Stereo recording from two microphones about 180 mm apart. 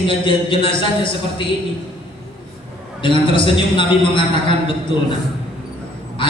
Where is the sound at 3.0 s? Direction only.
30° left (ahead or behind).